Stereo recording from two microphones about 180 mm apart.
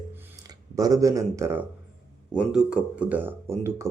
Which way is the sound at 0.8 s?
20° right (ahead or behind).